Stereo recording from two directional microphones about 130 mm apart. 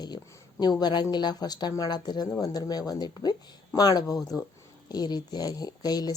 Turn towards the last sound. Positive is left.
turn(degrees=30)  # may be behind; listen again after turning